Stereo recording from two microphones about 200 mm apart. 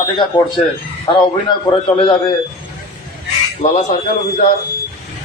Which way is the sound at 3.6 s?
40° left (ahead or behind).